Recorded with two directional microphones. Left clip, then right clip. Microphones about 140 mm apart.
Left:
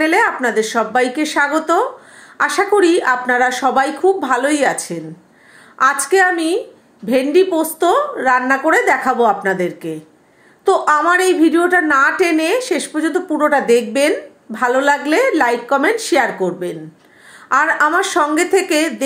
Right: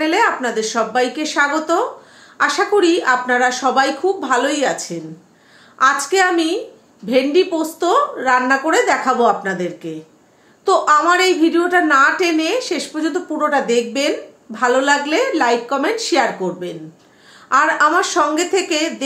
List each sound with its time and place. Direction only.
0.0 s a woman's voice: 30° left (ahead or behind)